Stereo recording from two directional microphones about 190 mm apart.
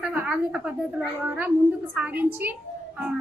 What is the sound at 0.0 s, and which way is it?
A woman's voice, 10° right (ahead or behind).